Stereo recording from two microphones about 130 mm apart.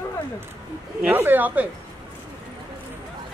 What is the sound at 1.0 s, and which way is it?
Speech, 15° right (ahead or behind).